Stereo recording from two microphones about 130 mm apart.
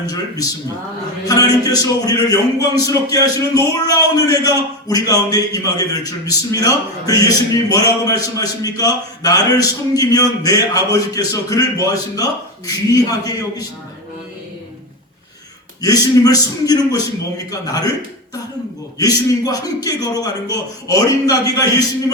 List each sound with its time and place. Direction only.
0.0 s a man's voice: 30° left (ahead or behind)
15.8 s a man's voice: 30° left (ahead or behind)
18.9 s a man's voice: 30° left (ahead or behind)